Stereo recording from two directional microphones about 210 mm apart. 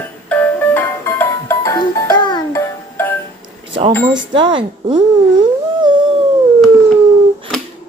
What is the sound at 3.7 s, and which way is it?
Speech, 30° right (ahead or behind).